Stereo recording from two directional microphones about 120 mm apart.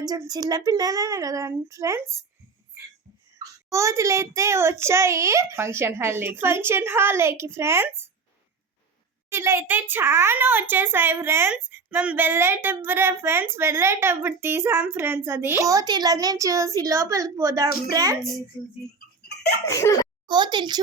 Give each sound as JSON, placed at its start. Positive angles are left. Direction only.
{"t": 0.0, "sound": "a child's voice", "side_deg": -30}
{"t": 3.3, "sound": "a child's voice", "side_deg": -25}
{"t": 9.3, "sound": "a child's voice", "side_deg": -20}
{"t": 18.2, "sound": "a child's voice", "side_deg": 0}
{"t": 19.6, "sound": "speech", "side_deg": 25}
{"t": 20.2, "sound": "a woman's voice", "side_deg": -40}